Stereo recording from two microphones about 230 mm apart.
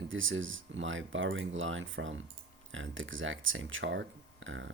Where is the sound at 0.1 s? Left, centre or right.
Right.